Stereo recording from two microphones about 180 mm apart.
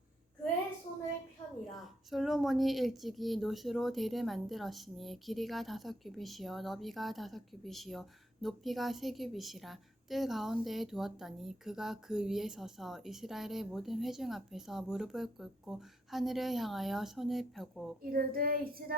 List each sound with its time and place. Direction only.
1.7 s a woman's voice: centre (ahead or behind)
18.0 s child singing: 55° right (ahead or behind)